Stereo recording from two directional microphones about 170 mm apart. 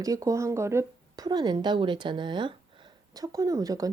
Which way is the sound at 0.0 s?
20° right (ahead or behind).